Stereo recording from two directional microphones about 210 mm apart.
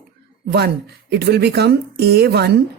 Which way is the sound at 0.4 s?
50° right (ahead or behind).